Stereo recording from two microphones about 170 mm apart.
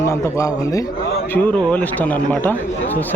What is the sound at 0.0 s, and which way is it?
Speech, 15° left (ahead or behind).